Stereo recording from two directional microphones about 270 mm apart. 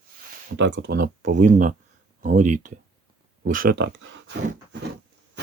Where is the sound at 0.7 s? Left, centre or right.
Right.